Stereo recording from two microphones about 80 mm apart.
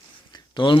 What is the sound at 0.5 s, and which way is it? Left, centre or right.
Speech, left.